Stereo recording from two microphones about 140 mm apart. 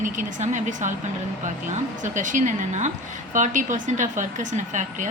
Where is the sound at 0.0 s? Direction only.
65° right (ahead or behind).